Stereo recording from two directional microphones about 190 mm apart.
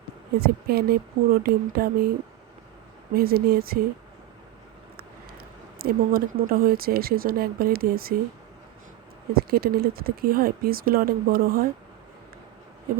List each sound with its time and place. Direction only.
0.3 s speech: 55° right (ahead or behind)
3.2 s speech: 55° right (ahead or behind)
5.8 s speech: 50° right (ahead or behind)
9.3 s speech: 55° right (ahead or behind)